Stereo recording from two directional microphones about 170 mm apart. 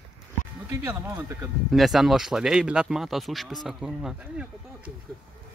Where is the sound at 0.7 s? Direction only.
15° right (ahead or behind).